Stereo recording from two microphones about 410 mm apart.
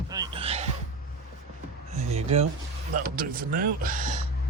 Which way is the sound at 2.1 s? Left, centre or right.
Centre.